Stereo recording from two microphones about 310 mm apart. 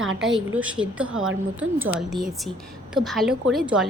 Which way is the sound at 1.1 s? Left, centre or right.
Right.